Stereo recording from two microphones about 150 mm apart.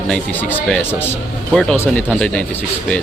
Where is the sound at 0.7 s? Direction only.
15° left (ahead or behind).